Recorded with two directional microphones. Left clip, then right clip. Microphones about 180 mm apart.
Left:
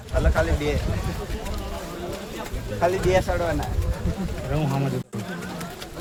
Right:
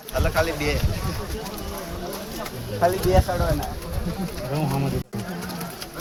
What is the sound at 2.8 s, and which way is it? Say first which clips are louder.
Speech: right 1 dB; 10° right (ahead or behind).